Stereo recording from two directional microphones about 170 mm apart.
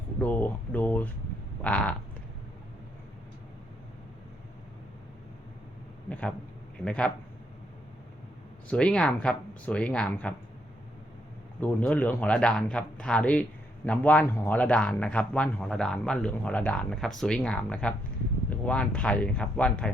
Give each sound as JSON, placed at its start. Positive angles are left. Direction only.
{"t": 0.2, "sound": "speech", "side_deg": 10}
{"t": 6.1, "sound": "speech", "side_deg": 10}
{"t": 8.7, "sound": "speech", "side_deg": 5}
{"t": 11.6, "sound": "speech", "side_deg": 10}